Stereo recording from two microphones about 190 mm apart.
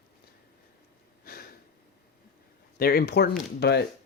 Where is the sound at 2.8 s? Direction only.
55° left (ahead or behind).